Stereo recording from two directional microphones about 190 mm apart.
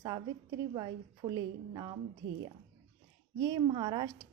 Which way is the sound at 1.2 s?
25° right (ahead or behind).